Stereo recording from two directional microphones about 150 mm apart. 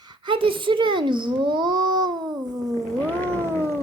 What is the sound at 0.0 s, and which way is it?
A child's voice, 30° right (ahead or behind).